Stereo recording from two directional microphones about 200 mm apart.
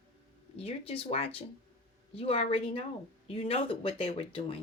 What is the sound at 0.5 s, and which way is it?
Speech, 30° left (ahead or behind).